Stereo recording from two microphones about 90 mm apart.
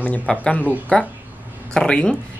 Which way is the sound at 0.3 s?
15° left (ahead or behind).